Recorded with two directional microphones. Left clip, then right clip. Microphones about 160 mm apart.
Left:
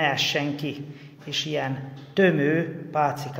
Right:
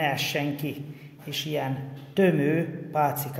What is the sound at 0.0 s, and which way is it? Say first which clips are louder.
A man's voice: left 3 dB; 15° right (ahead or behind).